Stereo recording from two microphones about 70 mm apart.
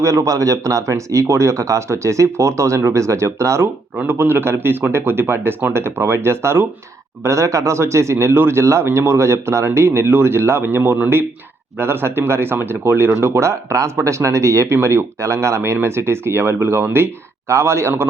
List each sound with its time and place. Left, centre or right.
0.0 s speech: right
4.0 s speech: right